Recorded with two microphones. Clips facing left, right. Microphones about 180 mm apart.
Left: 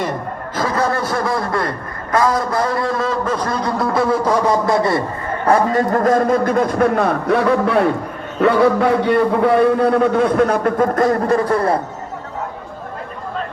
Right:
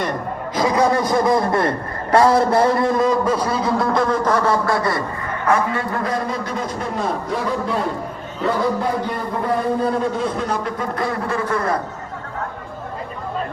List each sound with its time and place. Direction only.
0.5 s a man's voice: 15° right (ahead or behind); by 5.0 s 25° left (ahead or behind)
5.5 s a man's voice: 35° left (ahead or behind)